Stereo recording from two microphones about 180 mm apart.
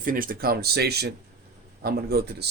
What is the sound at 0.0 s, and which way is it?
Speech, 50° right (ahead or behind).